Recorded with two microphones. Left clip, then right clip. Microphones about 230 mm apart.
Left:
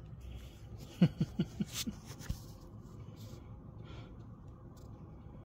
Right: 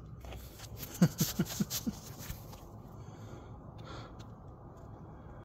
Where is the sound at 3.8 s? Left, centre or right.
Centre.